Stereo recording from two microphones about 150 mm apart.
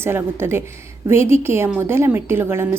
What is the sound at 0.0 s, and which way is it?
A woman's voice, 15° right (ahead or behind).